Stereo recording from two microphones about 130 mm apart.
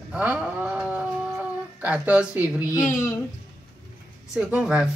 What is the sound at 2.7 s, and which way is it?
Speech, 25° left (ahead or behind).